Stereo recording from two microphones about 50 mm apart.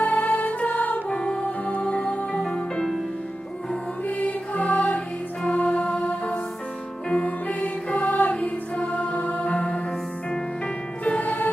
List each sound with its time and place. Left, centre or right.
0.0 s music: left
1.1 s music: centre
4.2 s music: left
11.1 s music: left